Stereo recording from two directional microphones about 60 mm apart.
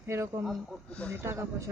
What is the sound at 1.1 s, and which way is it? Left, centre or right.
Speech, right.